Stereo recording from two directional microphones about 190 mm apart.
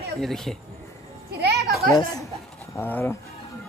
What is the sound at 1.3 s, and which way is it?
Children playing, 60° right (ahead or behind).